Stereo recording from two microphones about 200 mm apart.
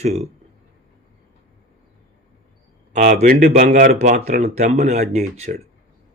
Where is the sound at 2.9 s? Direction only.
40° right (ahead or behind).